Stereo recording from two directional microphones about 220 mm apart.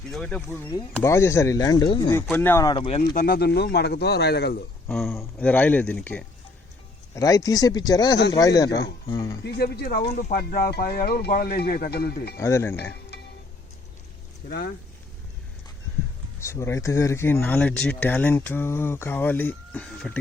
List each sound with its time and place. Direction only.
0.1 s speech: 5° left (ahead or behind); by 3.0 s 20° left (ahead or behind)
3.2 s speech: 45° left (ahead or behind)
4.9 s speech: centre (ahead or behind)
9.4 s speech: 45° left (ahead or behind)
12.4 s speech: 10° left (ahead or behind)
14.4 s speech: 45° left (ahead or behind)
16.4 s speech: 10° left (ahead or behind)